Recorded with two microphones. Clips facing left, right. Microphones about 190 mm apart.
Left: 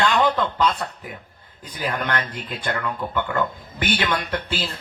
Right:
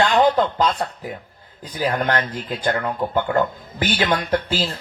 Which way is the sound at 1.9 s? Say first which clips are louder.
Right 4 dB; 35° right (ahead or behind).